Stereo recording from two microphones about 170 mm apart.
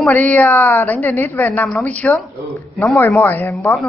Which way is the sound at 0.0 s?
10° left (ahead or behind).